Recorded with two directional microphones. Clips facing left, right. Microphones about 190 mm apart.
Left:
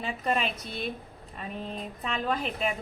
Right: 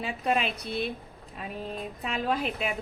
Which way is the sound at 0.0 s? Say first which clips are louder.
Right 1 dB; centre (ahead or behind).